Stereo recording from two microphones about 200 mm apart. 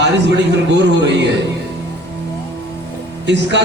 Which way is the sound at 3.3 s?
60° right (ahead or behind).